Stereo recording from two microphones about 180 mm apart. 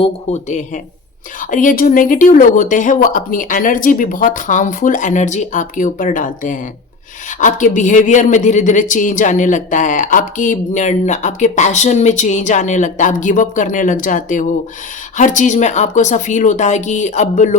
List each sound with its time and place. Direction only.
0.0 s a woman's voice: 40° left (ahead or behind)